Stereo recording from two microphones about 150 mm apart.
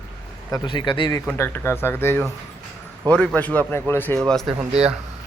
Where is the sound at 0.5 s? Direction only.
30° left (ahead or behind).